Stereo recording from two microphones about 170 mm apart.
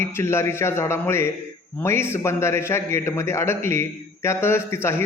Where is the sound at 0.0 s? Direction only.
15° left (ahead or behind).